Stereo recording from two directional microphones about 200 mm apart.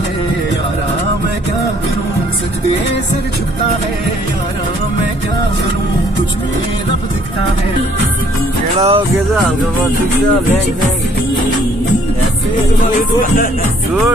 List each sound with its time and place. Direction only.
8.7 s speech: 30° right (ahead or behind)